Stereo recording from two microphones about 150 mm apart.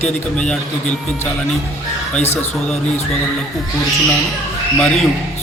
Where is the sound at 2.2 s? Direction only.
50° left (ahead or behind).